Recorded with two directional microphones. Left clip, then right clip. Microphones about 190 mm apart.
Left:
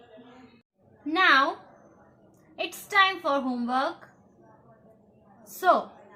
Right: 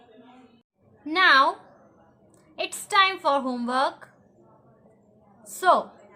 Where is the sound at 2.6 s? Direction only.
45° right (ahead or behind).